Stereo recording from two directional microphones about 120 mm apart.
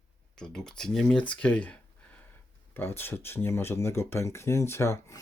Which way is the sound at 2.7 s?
20° left (ahead or behind).